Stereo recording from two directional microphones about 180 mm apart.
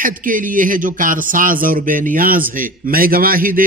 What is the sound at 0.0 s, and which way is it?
Speech, 50° right (ahead or behind).